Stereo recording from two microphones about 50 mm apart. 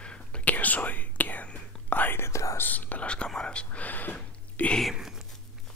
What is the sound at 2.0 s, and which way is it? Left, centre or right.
Whispering, left.